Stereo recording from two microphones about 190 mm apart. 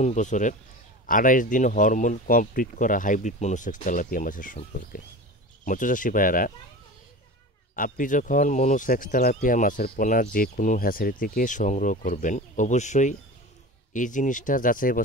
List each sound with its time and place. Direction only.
0.0 s speech: 40° left (ahead or behind)
7.7 s speech: 45° left (ahead or behind)